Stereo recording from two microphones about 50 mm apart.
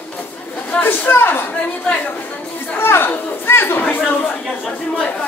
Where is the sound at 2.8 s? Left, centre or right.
Left.